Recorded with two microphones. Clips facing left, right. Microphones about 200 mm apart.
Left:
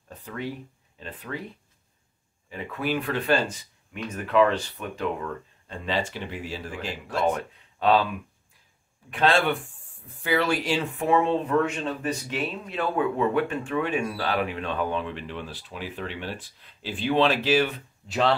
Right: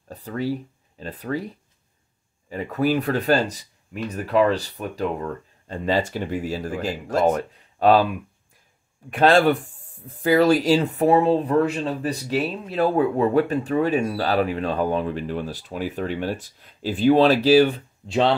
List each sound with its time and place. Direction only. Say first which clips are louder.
0.1 s speech: right 7 dB; 35° right (ahead or behind)
2.5 s speech: right 7 dB; 40° right (ahead or behind)
9.1 s speech: right 6 dB; 40° right (ahead or behind)